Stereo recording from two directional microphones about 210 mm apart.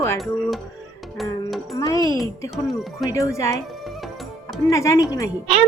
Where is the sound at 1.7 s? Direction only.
15° left (ahead or behind).